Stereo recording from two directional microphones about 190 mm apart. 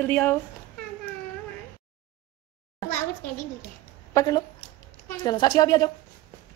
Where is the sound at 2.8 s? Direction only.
15° left (ahead or behind).